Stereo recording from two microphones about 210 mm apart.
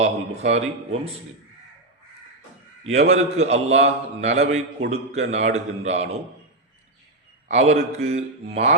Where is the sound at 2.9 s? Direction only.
30° right (ahead or behind).